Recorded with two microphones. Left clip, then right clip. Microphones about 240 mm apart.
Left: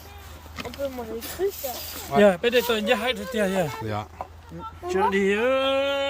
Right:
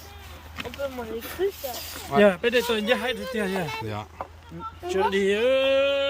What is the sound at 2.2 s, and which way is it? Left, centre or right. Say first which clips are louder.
Speech: left 1 dB; left.